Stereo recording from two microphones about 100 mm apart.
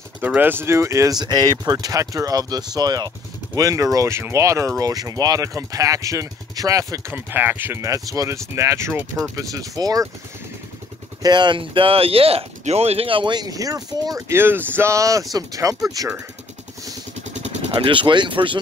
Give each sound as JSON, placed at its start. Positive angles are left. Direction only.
{"t": 0.2, "sound": "speech", "side_deg": -20}
{"t": 7.1, "sound": "speech", "side_deg": -20}
{"t": 7.8, "sound": "speech", "side_deg": -35}
{"t": 11.2, "sound": "speech", "side_deg": -50}
{"t": 14.3, "sound": "speech", "side_deg": -20}
{"t": 17.7, "sound": "speech", "side_deg": -55}